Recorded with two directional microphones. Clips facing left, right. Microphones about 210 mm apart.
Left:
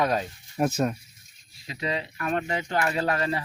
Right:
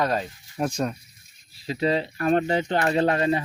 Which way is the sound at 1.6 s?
30° right (ahead or behind).